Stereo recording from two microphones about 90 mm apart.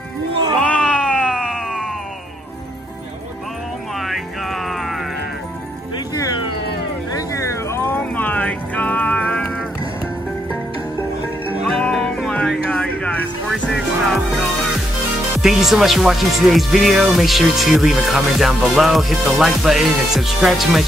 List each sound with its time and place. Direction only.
0.7 s a sound: 5° left (ahead or behind)
4.0 s music: centre (ahead or behind)
7.2 s a sound: 35° left (ahead or behind)
8.0 s music: 20° left (ahead or behind)
11.9 s music: centre (ahead or behind)
12.3 s music: 10° left (ahead or behind)
13.5 s music: centre (ahead or behind)
15.4 s speech: 5° right (ahead or behind)